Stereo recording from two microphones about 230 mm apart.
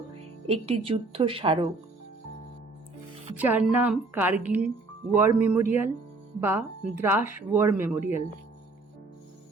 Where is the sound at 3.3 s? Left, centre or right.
Centre.